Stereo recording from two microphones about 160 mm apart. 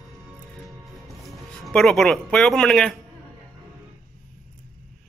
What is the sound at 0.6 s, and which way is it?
Music, centre (ahead or behind).